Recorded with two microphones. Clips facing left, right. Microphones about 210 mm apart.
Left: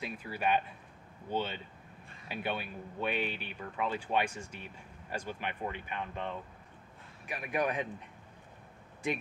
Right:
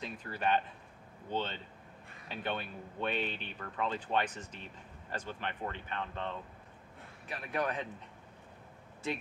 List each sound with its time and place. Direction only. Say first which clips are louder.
0.0 s speech: left 1 dB; 10° left (ahead or behind)